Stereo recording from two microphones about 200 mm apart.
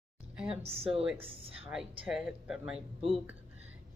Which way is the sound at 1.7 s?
Centre (ahead or behind).